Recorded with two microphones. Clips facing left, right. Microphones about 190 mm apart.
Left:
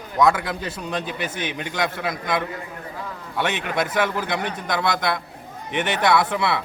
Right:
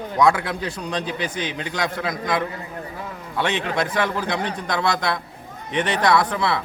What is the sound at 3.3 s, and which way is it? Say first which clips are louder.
Speech: right 1 dB; 10° left (ahead or behind).